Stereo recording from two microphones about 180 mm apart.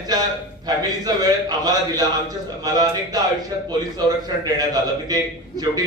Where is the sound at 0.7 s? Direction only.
20° right (ahead or behind).